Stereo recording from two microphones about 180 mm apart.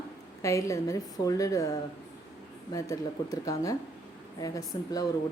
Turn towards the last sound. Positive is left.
turn(degrees=20)  # may be behind; listen again after turning